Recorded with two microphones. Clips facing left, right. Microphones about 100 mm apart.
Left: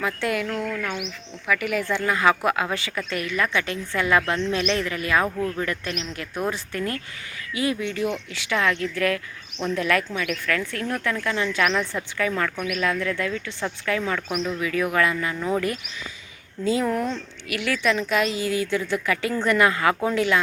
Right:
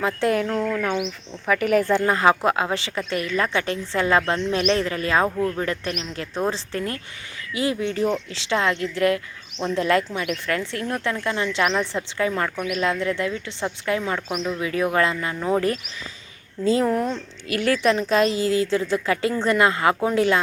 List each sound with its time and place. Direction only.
0.0 s a woman's voice: 30° right (ahead or behind)
1.5 s a woman's voice: 40° right (ahead or behind); by 20.2 s 25° right (ahead or behind)